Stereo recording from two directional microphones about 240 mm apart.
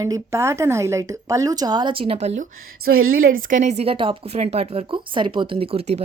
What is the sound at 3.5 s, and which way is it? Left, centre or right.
A woman's voice, right.